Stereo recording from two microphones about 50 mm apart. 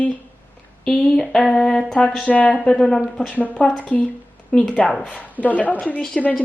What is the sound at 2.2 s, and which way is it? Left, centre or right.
Speech, left.